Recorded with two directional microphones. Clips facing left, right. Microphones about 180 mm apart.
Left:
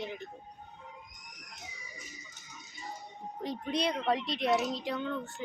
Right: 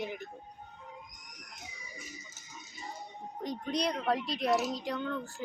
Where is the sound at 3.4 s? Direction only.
Centre (ahead or behind).